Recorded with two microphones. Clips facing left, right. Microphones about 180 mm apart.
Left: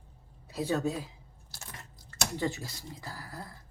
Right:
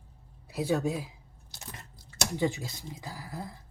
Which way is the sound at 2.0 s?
15° right (ahead or behind).